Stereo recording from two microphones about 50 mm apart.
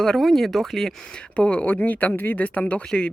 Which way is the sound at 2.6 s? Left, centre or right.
Left.